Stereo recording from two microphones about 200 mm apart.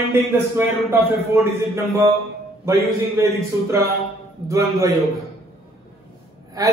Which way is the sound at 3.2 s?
15° right (ahead or behind).